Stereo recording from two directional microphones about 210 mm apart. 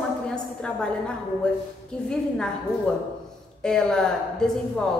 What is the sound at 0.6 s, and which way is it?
A woman's voice, 5° left (ahead or behind).